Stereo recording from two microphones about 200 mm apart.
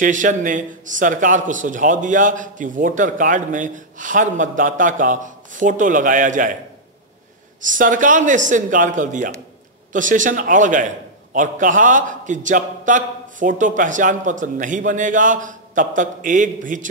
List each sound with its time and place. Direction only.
0.0 s a man's voice: 40° right (ahead or behind)
7.6 s a man's voice: 40° right (ahead or behind)